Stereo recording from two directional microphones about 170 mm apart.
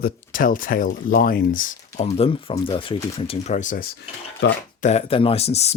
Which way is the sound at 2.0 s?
35° left (ahead or behind).